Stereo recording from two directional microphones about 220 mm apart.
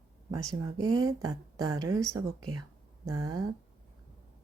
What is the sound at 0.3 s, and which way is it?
Speech, 15° right (ahead or behind).